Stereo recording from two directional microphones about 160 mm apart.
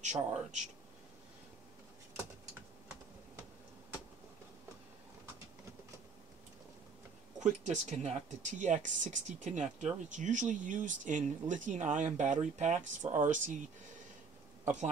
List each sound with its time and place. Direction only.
0.0 s speech: 45° right (ahead or behind)
7.3 s speech: 45° right (ahead or behind)
14.6 s a man's voice: 45° right (ahead or behind)